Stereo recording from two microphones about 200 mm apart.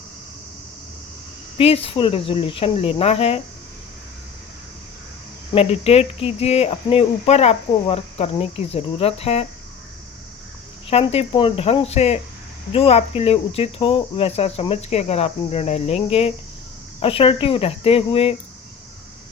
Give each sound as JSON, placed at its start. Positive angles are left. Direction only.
{"t": 1.5, "sound": "speech", "side_deg": 30}
{"t": 5.5, "sound": "speech", "side_deg": 30}
{"t": 10.8, "sound": "speech", "side_deg": 30}